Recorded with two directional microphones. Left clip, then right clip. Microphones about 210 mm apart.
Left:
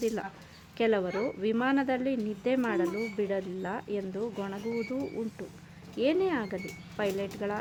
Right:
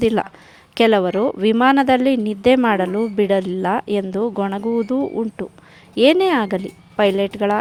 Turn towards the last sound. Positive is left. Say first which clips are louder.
# right 15 dB
turn(degrees=-45)  # may be behind; listen again after turning